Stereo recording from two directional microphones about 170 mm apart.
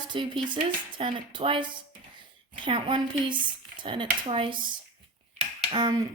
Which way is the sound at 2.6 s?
30° right (ahead or behind).